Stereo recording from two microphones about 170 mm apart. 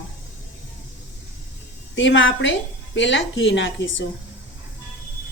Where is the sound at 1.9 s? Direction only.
90° left.